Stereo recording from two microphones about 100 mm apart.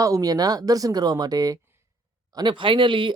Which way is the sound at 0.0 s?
35° right (ahead or behind).